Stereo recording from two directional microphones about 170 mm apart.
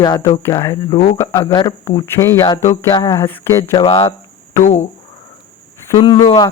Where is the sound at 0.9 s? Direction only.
35° left (ahead or behind).